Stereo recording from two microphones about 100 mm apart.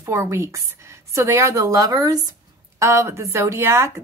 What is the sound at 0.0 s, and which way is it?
A woman's voice, 25° right (ahead or behind).